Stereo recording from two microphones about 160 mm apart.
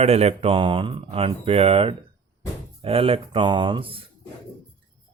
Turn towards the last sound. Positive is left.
turn(degrees=-35)  # may be behind; listen again after turning